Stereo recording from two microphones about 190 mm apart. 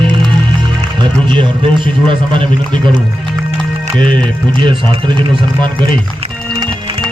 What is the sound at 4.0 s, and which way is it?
Speech, 5° left (ahead or behind).